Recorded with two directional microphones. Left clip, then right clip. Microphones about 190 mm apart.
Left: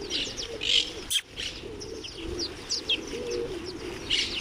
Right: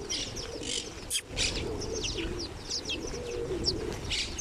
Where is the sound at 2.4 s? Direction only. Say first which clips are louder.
Left 4 dB; 50° right (ahead or behind).